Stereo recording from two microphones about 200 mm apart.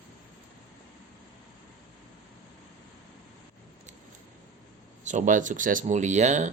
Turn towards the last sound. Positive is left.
turn(degrees=-35)  # may be behind; listen again after turning